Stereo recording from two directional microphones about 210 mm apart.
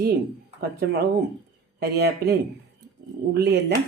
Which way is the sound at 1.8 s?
50° right (ahead or behind).